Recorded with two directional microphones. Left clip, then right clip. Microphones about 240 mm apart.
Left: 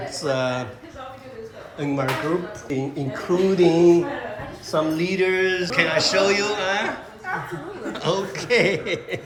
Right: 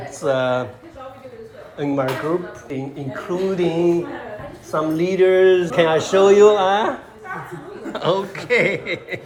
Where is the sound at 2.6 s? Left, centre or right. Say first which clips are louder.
Left 2 dB; centre.